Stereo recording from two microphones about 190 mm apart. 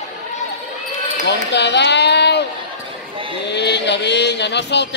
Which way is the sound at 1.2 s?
65° left (ahead or behind).